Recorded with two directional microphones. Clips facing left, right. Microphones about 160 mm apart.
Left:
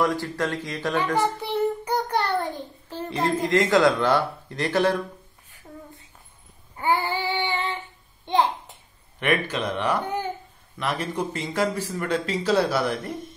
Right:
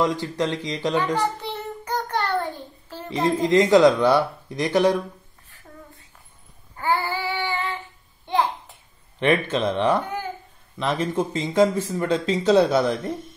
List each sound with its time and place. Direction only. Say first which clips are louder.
0.0 s speech: right 1 dB; 20° right (ahead or behind)
1.2 s child singing: left 3 dB; 10° left (ahead or behind)
3.1 s speech: right 3 dB; 15° right (ahead or behind)
6.8 s child singing: even; 20° left (ahead or behind)
8.3 s babbling: left 1 dB; 20° left (ahead or behind)
9.2 s speech: right 4 dB; 25° right (ahead or behind)
10.0 s a sound: left 2 dB; 20° left (ahead or behind)
10.8 s speech: right 4 dB; 25° right (ahead or behind)